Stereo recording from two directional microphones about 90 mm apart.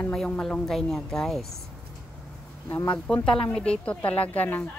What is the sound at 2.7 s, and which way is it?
Speech, 20° left (ahead or behind).